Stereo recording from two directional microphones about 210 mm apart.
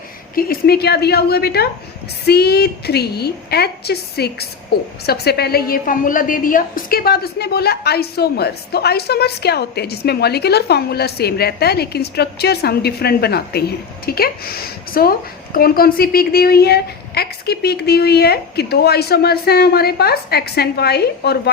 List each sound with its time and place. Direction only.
0.3 s a woman's voice: 45° left (ahead or behind)